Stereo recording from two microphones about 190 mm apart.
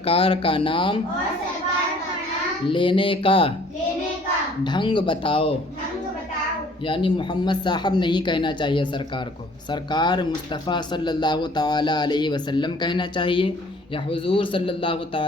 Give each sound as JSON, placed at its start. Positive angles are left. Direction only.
{"t": 0.0, "sound": "speech", "side_deg": 30}
{"t": 2.6, "sound": "speech", "side_deg": 25}
{"t": 4.6, "sound": "speech", "side_deg": 25}
{"t": 6.8, "sound": "speech", "side_deg": 25}